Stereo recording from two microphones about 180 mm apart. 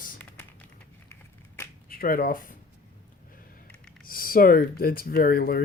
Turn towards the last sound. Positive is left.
turn(degrees=55)  # may be behind; listen again after turning